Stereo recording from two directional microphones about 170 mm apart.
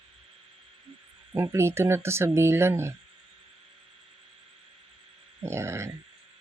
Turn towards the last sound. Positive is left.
turn(degrees=-15)  # may be behind; listen again after turning